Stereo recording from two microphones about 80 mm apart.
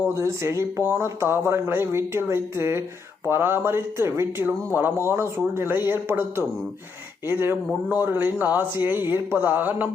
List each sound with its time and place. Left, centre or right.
0.1 s speech: right